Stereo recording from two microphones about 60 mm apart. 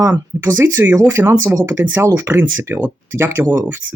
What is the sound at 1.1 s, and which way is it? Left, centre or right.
Speech, right.